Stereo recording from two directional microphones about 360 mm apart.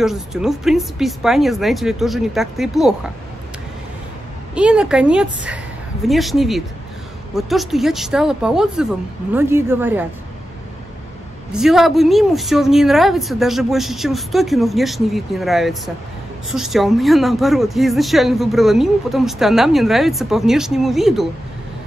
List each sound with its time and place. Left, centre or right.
0.0 s speech: centre
4.6 s speech: centre
11.5 s speech: centre